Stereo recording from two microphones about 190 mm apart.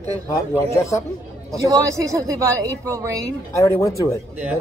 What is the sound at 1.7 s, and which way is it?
A woman's voice, 15° right (ahead or behind).